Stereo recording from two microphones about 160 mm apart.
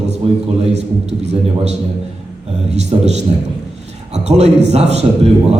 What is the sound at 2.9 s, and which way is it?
Speech, 35° right (ahead or behind).